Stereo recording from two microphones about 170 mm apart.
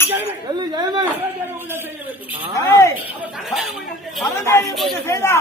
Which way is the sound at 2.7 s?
15° left (ahead or behind).